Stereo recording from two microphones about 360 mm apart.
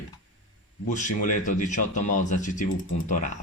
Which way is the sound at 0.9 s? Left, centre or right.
Left.